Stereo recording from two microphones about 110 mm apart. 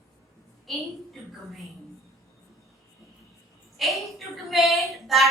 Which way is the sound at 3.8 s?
Centre (ahead or behind).